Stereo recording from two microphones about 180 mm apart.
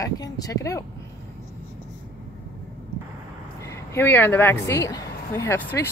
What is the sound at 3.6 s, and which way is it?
Speech, 15° left (ahead or behind).